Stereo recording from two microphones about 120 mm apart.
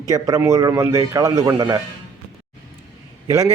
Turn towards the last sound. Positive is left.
turn(degrees=-25)  # may be behind; listen again after turning